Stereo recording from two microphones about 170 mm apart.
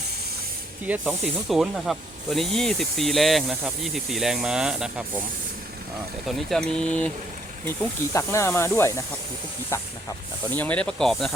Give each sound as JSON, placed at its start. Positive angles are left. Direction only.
{"t": 0.9, "sound": "speech", "side_deg": -5}
{"t": 6.2, "sound": "speech", "side_deg": 5}
{"t": 8.1, "sound": "speech", "side_deg": 15}
{"t": 10.5, "sound": "speech", "side_deg": 10}